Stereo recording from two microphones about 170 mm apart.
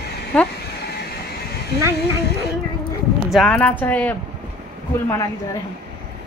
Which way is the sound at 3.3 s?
5° left (ahead or behind).